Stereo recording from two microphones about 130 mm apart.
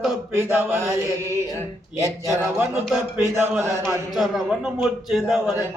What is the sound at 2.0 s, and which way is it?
Speech, 20° right (ahead or behind).